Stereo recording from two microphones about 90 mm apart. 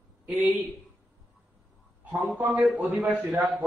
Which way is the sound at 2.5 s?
5° right (ahead or behind).